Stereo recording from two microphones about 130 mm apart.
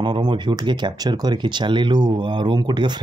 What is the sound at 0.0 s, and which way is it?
Speech, 40° right (ahead or behind).